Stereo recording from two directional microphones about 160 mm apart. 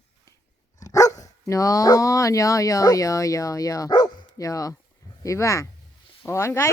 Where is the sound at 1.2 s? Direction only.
20° left (ahead or behind).